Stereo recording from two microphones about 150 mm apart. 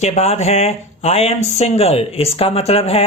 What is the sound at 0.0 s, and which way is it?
Speech, 45° left (ahead or behind).